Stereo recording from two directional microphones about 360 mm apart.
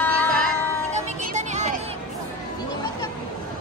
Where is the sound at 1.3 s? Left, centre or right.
Centre.